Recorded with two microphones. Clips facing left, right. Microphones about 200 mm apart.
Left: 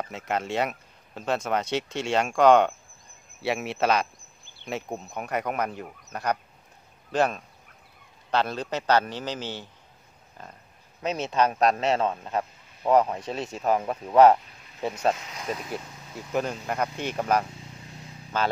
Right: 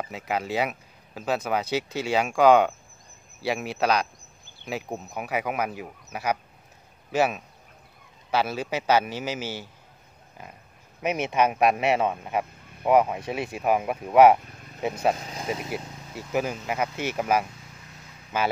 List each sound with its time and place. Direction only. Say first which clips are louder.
0.0 s a man's voice: even; centre (ahead or behind)
11.0 s a man's voice: right 1 dB; 15° right (ahead or behind)
15.1 s speech: right 4 dB; 30° right (ahead or behind)
15.7 s a man's voice: right 2 dB; 5° right (ahead or behind)